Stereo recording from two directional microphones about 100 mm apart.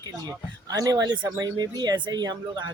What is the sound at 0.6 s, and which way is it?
Speech, 40° right (ahead or behind).